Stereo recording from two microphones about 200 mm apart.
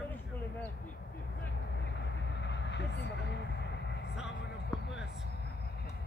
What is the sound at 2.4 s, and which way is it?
Vehicle, 60° left (ahead or behind).